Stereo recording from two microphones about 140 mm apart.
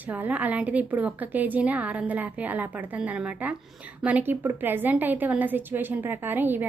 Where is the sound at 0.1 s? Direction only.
10° right (ahead or behind).